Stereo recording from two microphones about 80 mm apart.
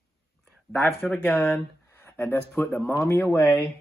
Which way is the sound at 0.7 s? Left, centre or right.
Left.